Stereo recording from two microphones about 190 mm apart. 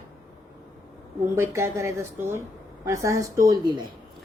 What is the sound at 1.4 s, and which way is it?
Speech, 15° right (ahead or behind).